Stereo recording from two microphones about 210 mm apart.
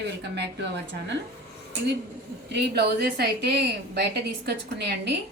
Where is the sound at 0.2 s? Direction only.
55° right (ahead or behind).